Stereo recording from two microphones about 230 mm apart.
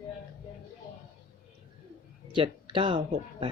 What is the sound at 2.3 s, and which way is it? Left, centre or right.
Speech, right.